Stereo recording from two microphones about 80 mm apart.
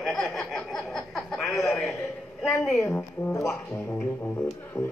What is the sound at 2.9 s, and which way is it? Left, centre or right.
Speech, centre.